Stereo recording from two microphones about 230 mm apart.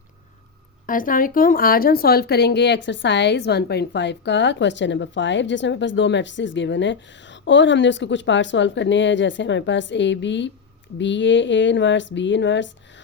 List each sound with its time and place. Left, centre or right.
0.9 s speech: left